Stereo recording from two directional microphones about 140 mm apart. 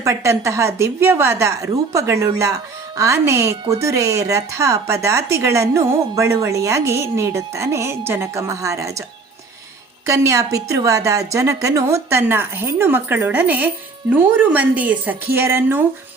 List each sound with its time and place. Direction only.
0.0 s a woman's voice: 20° right (ahead or behind)
10.1 s a woman's voice: 25° right (ahead or behind)